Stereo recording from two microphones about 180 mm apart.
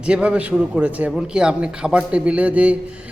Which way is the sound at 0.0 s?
5° right (ahead or behind).